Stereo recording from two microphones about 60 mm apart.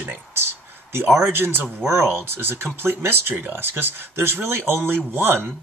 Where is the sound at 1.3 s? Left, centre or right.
Right.